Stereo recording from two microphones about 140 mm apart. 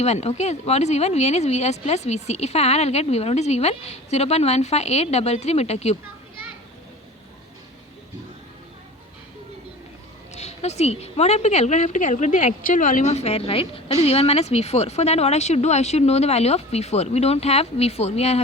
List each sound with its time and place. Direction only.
0.0 s a woman's voice: 50° left (ahead or behind)
10.3 s a woman's voice: 50° left (ahead or behind)